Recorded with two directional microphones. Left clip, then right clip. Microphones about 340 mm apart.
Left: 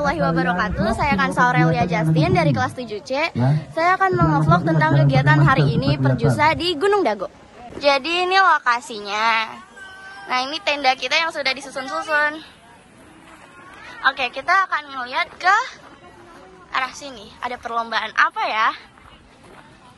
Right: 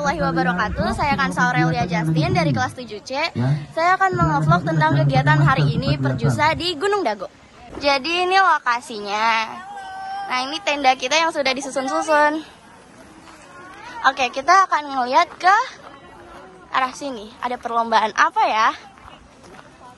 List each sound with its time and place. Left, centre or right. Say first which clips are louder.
0.0 s a woman's voice: even; centre
7.8 s a woman's voice: left 1 dB; centre
14.0 s a woman's voice: right 2 dB; centre
16.7 s a woman's voice: right 3 dB; centre